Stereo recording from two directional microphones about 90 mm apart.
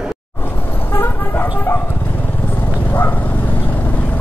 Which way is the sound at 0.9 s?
20° left (ahead or behind).